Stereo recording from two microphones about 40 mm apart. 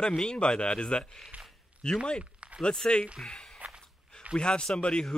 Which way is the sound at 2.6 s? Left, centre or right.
Centre.